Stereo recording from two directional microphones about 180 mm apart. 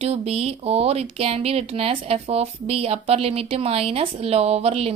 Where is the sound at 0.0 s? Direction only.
35° right (ahead or behind).